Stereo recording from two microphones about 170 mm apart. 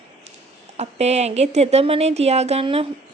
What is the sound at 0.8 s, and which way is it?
A woman's voice, 40° right (ahead or behind).